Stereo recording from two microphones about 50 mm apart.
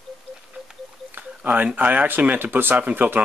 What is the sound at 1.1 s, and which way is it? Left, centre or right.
Speech, right.